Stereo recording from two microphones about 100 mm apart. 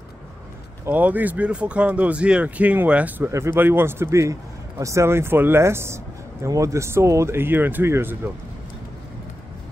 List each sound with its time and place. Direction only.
0.8 s speech: 15° right (ahead or behind)
3.3 s a man's voice: 30° right (ahead or behind)